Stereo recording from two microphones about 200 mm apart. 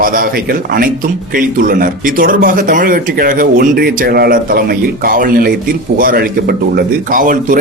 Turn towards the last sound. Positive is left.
turn(degrees=-40)  # may be behind; listen again after turning